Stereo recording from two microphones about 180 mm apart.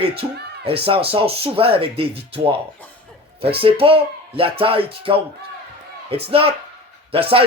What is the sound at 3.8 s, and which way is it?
Speech, 30° right (ahead or behind).